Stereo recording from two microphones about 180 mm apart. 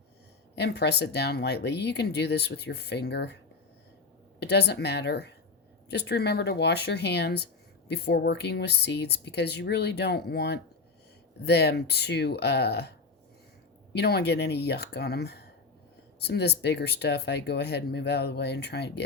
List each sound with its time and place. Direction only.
0.5 s speech: 70° left (ahead or behind)
4.4 s speech: 70° left (ahead or behind)
13.9 s speech: 65° left (ahead or behind)